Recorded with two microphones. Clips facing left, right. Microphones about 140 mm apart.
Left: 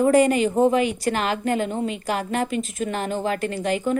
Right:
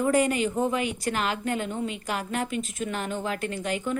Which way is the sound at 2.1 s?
75° left (ahead or behind).